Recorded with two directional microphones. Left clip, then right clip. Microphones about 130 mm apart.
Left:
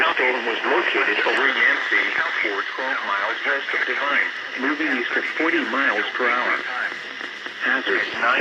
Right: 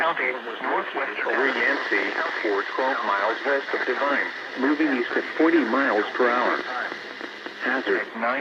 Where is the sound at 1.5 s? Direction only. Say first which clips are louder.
Left 4 dB; 50° right (ahead or behind).